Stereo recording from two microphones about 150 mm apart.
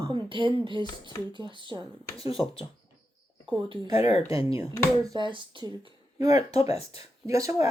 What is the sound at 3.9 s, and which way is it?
Speech, 45° left (ahead or behind).